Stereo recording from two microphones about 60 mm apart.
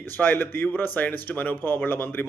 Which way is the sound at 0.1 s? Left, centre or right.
Left.